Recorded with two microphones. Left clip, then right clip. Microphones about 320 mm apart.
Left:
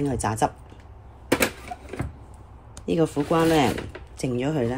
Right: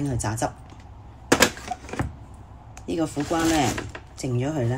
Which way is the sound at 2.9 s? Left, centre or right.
Left.